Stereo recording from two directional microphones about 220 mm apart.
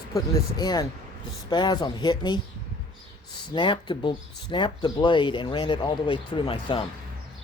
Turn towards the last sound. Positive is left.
turn(degrees=20)  # may be behind; listen again after turning